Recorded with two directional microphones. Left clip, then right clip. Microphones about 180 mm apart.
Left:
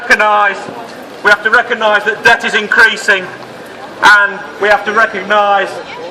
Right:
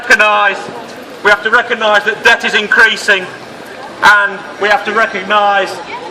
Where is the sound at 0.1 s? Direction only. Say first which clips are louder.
Right 1 dB; 15° right (ahead or behind).